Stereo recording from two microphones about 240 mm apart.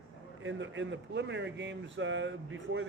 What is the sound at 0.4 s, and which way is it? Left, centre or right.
Speech, right.